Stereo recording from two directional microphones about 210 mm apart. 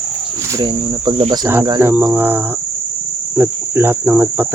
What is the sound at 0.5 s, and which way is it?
Speech, 20° right (ahead or behind).